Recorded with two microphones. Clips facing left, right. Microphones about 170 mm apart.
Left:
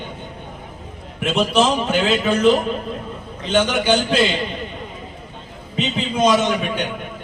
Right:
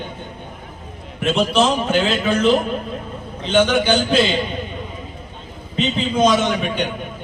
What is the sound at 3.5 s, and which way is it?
Speech, 5° left (ahead or behind).